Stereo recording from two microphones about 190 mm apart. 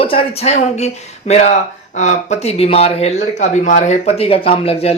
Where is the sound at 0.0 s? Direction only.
30° left (ahead or behind).